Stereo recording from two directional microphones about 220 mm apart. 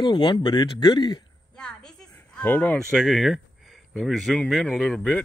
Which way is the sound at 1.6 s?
5° left (ahead or behind).